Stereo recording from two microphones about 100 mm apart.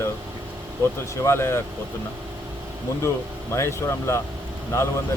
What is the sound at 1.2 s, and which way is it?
Speech, 25° left (ahead or behind).